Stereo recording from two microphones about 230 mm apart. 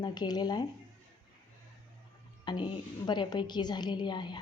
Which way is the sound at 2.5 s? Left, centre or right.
Centre.